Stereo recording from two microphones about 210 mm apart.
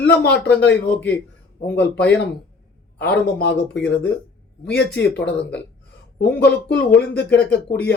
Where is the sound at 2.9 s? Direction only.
50° left (ahead or behind).